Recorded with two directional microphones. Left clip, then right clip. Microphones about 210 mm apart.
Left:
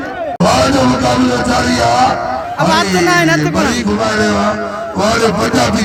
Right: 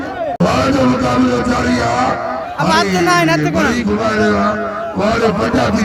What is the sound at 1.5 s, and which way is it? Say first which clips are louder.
Speech: left 4 dB; 45° left (ahead or behind).